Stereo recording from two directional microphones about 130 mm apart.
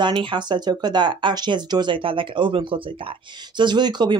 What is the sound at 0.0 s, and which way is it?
Speech, 40° right (ahead or behind).